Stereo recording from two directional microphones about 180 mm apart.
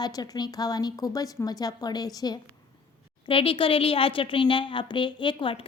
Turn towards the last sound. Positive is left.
turn(degrees=25)  # may be behind; listen again after turning